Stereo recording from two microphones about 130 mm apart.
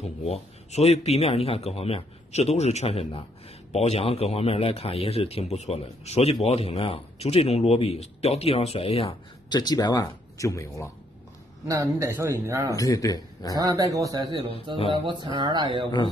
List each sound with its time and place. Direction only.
0.2 s a man's voice: 55° left (ahead or behind)
9.5 s speech: 30° left (ahead or behind)
11.6 s a man's voice: 25° right (ahead or behind)
12.7 s speech: 25° left (ahead or behind)
13.6 s a man's voice: 25° right (ahead or behind)